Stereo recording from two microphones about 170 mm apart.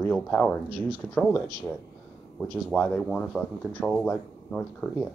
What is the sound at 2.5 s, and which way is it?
Speech, 5° left (ahead or behind).